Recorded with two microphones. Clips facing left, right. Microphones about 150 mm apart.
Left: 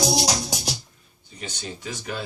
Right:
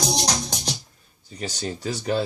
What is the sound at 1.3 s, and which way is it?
Speech, 40° right (ahead or behind).